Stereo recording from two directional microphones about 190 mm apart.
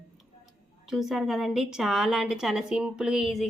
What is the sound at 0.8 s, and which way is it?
A woman's voice, centre (ahead or behind).